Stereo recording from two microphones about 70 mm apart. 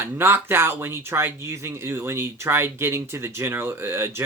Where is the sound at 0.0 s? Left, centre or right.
Right.